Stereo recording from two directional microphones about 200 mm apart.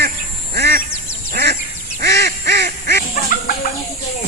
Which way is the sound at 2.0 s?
55° right (ahead or behind).